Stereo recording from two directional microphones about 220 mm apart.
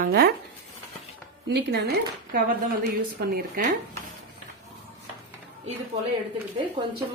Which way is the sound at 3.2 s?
45° right (ahead or behind).